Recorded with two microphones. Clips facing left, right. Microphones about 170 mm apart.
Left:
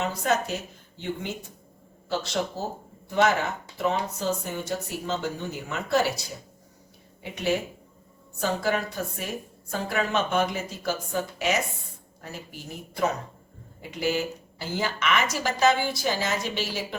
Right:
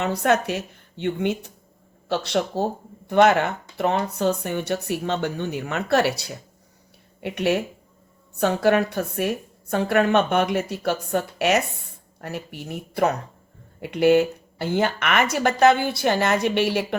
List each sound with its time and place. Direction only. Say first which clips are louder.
0.0 s speech: right 5 dB; 65° right (ahead or behind)